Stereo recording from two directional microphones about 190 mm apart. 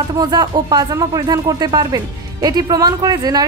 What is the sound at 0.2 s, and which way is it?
Speech, 20° right (ahead or behind).